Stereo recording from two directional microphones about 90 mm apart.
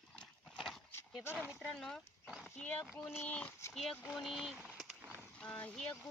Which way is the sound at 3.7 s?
Centre (ahead or behind).